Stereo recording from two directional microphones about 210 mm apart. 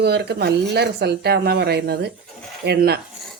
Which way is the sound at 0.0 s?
50° right (ahead or behind).